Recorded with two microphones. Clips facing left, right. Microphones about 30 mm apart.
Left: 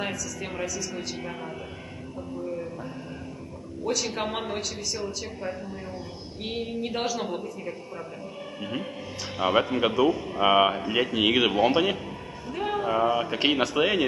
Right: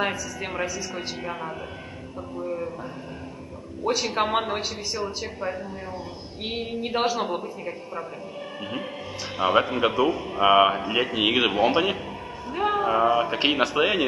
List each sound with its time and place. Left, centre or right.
0.0 s speech: right
3.8 s speech: right
9.4 s a man's voice: centre